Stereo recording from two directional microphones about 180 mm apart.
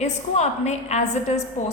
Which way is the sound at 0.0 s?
40° left (ahead or behind).